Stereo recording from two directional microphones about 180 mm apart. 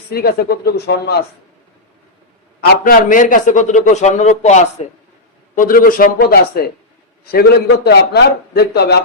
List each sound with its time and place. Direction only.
0.1 s a man's voice: 60° left (ahead or behind)
2.6 s a man's voice: 50° left (ahead or behind)
5.5 s a man's voice: 50° left (ahead or behind)